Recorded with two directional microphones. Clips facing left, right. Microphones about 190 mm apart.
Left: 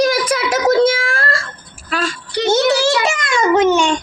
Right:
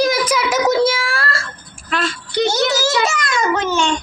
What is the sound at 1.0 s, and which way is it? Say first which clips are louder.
Wail: left 2 dB; 50° left (ahead or behind).